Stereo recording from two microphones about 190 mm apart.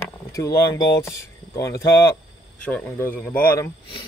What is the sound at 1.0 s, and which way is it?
Speech, 15° left (ahead or behind).